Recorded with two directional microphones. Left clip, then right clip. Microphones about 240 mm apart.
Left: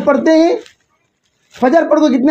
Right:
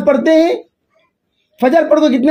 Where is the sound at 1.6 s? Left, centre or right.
Right.